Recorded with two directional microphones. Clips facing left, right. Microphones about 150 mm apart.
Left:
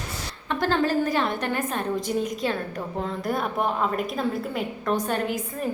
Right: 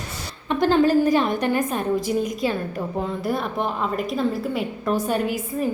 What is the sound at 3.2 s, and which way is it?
A woman's voice, centre (ahead or behind).